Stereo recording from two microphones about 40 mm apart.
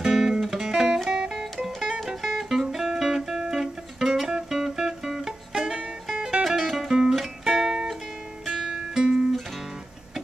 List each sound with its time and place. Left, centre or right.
0.0 s music: centre
6.4 s music: centre